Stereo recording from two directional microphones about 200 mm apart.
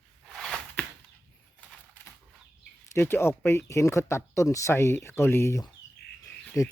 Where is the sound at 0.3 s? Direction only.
Centre (ahead or behind).